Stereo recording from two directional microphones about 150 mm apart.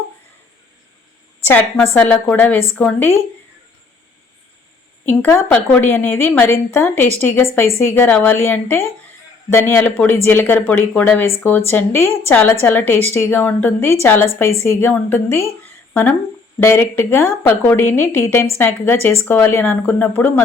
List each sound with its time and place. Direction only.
1.5 s speech: 15° left (ahead or behind)
5.0 s speech: 10° left (ahead or behind)
16.6 s speech: 15° left (ahead or behind)